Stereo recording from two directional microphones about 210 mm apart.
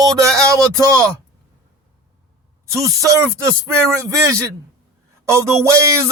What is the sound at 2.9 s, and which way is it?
A man's voice, 15° right (ahead or behind).